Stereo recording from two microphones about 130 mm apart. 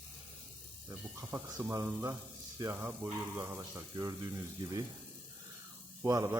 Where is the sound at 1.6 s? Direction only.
25° right (ahead or behind).